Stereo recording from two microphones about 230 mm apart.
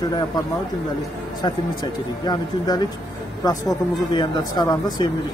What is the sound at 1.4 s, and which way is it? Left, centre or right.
Speech, centre.